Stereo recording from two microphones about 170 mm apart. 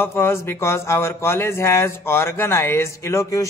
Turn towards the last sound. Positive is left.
turn(degrees=20)  # may be behind; listen again after turning